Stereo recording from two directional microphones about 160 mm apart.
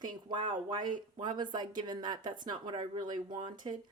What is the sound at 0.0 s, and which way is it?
Speech, 30° right (ahead or behind).